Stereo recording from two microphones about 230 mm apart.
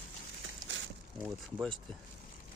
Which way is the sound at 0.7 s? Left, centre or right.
Right.